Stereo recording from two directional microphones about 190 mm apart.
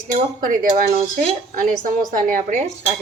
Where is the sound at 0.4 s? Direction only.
45° right (ahead or behind).